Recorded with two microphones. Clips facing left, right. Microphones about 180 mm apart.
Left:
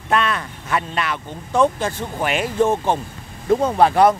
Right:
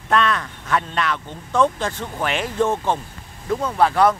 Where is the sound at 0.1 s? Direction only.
5° left (ahead or behind).